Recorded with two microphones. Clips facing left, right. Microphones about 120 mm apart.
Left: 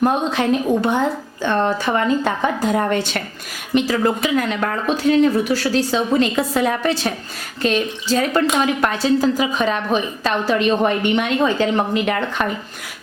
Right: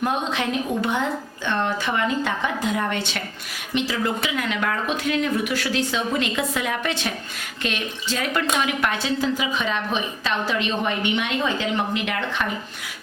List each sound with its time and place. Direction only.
0.0 s a woman's voice: 40° left (ahead or behind)